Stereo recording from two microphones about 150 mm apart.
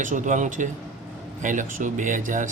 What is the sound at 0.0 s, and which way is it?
Speech, 60° right (ahead or behind).